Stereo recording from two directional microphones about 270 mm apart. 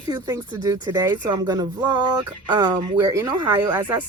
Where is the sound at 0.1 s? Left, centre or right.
Centre.